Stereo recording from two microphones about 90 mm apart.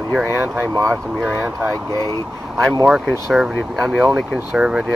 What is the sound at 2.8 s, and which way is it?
Speech, 10° right (ahead or behind).